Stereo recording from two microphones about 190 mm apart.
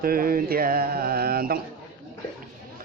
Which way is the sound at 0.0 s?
50° right (ahead or behind).